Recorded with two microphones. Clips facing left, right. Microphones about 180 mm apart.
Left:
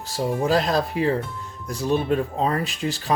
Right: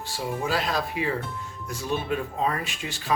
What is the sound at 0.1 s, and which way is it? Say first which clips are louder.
Speech: left 7 dB; 40° left (ahead or behind).